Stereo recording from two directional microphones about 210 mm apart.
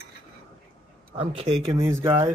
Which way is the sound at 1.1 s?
25° right (ahead or behind).